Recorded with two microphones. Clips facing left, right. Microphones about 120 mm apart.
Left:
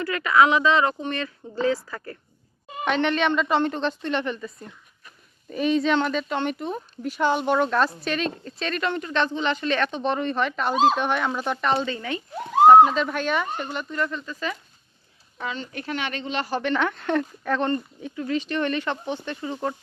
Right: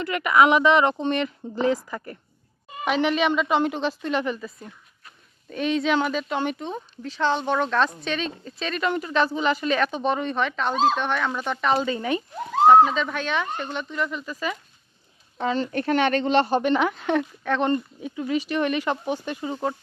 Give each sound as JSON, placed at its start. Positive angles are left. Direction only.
{"t": 0.0, "sound": "speech", "side_deg": -20}
{"t": 2.8, "sound": "speech", "side_deg": -5}
{"t": 11.7, "sound": "speech", "side_deg": -5}
{"t": 11.9, "sound": "speech", "side_deg": -20}
{"t": 12.6, "sound": "speech", "side_deg": 10}
{"t": 15.4, "sound": "speech", "side_deg": -40}
{"t": 16.4, "sound": "speech", "side_deg": -20}
{"t": 16.8, "sound": "speech", "side_deg": -5}
{"t": 18.0, "sound": "speech", "side_deg": -10}